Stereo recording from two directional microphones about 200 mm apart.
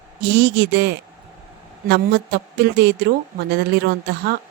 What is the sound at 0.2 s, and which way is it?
A woman's voice, 55° right (ahead or behind).